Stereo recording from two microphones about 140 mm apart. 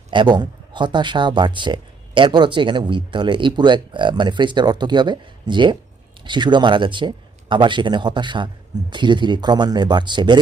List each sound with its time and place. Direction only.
0.1 s speech: 35° right (ahead or behind)